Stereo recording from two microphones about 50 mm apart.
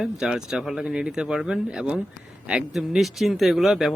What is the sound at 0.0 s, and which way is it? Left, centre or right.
Speech, centre.